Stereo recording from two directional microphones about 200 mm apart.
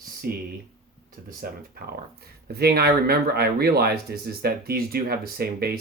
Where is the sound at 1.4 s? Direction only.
50° right (ahead or behind).